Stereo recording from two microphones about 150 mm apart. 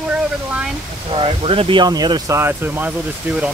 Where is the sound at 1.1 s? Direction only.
35° right (ahead or behind).